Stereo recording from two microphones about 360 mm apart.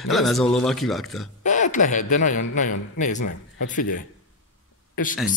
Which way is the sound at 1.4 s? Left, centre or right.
Centre.